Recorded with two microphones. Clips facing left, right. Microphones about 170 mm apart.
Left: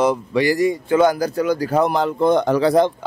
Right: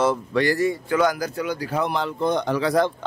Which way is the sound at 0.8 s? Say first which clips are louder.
Left 5 dB; 25° left (ahead or behind).